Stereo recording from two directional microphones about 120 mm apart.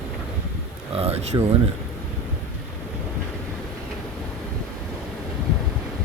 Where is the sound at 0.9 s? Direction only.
60° right (ahead or behind).